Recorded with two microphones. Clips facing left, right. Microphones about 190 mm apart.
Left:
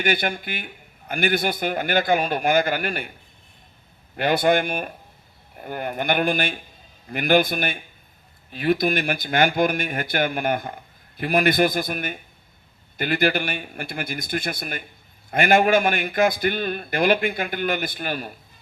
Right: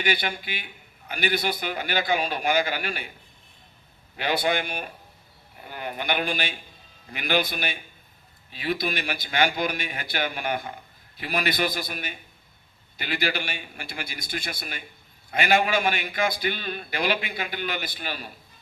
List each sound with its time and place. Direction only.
0.0 s a man's voice: 50° left (ahead or behind)
4.2 s a man's voice: 50° left (ahead or behind)